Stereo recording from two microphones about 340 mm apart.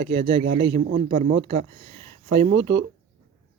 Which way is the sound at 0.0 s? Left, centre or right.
Centre.